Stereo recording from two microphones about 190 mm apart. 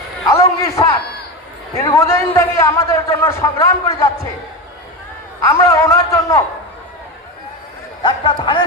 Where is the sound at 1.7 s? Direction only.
15° left (ahead or behind).